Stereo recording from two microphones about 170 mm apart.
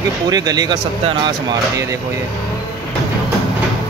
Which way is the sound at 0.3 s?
25° right (ahead or behind).